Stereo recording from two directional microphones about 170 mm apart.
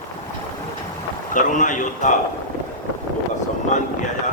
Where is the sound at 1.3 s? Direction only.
50° left (ahead or behind).